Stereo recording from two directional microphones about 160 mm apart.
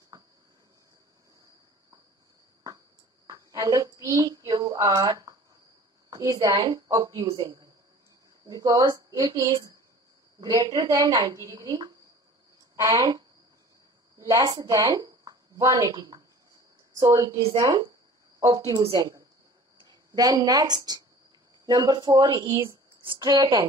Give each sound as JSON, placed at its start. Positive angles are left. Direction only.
{"t": 0.1, "sound": "cricket", "side_deg": -25}
{"t": 3.3, "sound": "a sound", "side_deg": -20}
{"t": 6.0, "sound": "a man's voice", "side_deg": -20}